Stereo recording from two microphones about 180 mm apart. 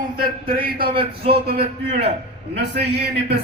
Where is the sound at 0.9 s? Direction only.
30° right (ahead or behind).